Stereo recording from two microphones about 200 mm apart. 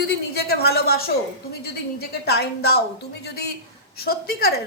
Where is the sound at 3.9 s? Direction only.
50° left (ahead or behind).